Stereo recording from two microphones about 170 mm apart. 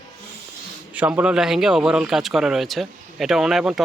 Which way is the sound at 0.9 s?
10° right (ahead or behind).